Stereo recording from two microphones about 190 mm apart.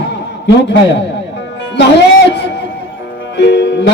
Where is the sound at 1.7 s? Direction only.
65° left (ahead or behind).